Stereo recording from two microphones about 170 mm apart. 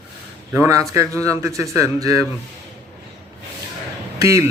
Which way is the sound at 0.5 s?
20° right (ahead or behind).